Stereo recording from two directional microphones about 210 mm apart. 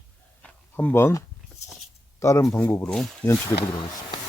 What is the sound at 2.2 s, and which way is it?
Speech, 15° left (ahead or behind).